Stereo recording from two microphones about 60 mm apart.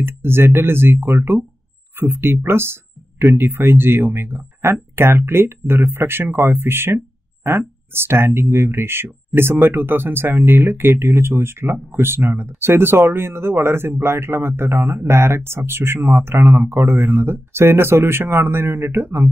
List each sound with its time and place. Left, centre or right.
0.0 s speech: right
15.0 s speech: right